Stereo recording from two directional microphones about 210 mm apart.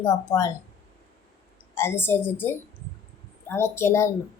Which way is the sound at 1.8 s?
10° left (ahead or behind).